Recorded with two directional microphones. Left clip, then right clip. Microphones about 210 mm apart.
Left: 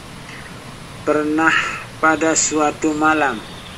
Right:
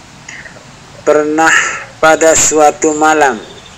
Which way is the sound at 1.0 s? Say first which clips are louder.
Right 7 dB; 45° right (ahead or behind).